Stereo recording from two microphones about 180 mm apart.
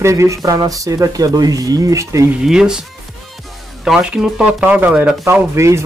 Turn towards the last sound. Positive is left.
turn(degrees=-15)  # may be behind; listen again after turning